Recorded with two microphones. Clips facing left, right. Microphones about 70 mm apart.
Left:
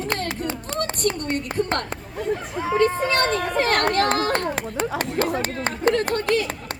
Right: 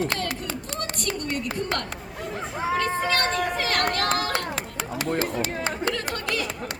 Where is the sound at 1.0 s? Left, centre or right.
Left.